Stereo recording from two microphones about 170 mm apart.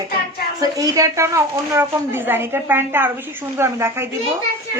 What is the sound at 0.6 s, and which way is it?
A woman's voice, 20° right (ahead or behind).